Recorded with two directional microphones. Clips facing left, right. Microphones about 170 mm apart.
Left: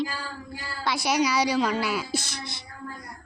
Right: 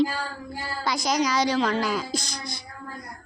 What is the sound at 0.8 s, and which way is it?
A woman's voice, 5° left (ahead or behind).